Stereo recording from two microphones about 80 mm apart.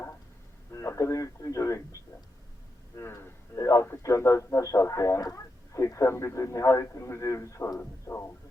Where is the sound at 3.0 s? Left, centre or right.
Left.